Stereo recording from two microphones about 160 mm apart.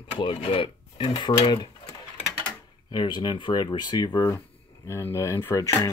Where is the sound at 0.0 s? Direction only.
35° left (ahead or behind).